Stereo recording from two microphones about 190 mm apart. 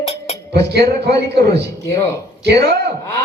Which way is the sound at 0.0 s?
35° left (ahead or behind).